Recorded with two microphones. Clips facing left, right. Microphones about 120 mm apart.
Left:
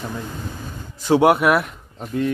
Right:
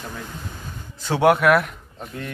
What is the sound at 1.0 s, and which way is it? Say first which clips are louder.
Speech: left 2 dB; 15° left (ahead or behind).